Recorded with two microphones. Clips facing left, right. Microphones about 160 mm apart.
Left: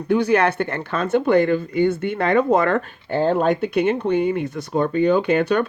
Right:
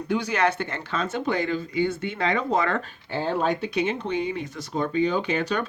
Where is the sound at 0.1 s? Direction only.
55° left (ahead or behind).